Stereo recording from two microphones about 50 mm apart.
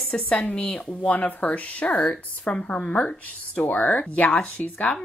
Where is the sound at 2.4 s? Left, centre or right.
Left.